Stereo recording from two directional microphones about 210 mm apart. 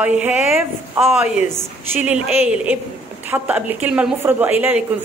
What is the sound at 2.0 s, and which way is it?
A woman's voice, 5° right (ahead or behind).